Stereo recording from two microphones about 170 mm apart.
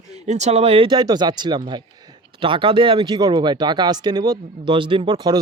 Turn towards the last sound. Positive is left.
turn(degrees=-25)  # may be behind; listen again after turning